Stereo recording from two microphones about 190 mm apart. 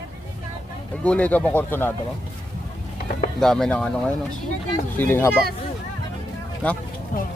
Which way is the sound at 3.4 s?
Centre (ahead or behind).